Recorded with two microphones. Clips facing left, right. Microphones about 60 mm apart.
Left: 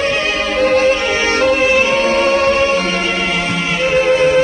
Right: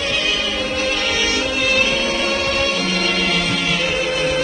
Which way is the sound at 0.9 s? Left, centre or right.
Left.